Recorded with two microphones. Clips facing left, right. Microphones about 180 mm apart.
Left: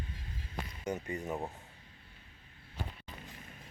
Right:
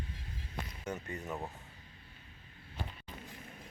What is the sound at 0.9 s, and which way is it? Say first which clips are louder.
Music: left 5 dB; 15° left (ahead or behind).